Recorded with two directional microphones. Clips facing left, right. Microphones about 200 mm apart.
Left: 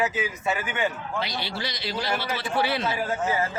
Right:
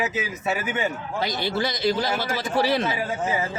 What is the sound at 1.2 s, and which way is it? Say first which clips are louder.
A man's voice: right 7 dB; 45° right (ahead or behind).